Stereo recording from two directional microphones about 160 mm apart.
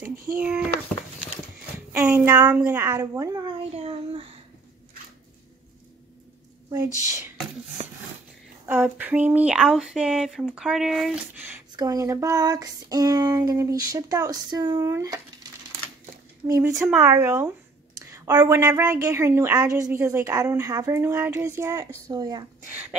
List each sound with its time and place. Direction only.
0.1 s speech: 65° right (ahead or behind)
0.4 s speech: 5° right (ahead or behind)
1.9 s a sound: 10° right (ahead or behind)
2.2 s a woman's voice: 20° right (ahead or behind)
3.7 s a child's voice: 40° right (ahead or behind)
7.8 s a sound: 40° right (ahead or behind)
8.6 s speech: 10° right (ahead or behind)
11.7 s a woman's voice: 25° right (ahead or behind)
16.4 s a woman's voice: 15° right (ahead or behind)
22.7 s speech: 10° right (ahead or behind)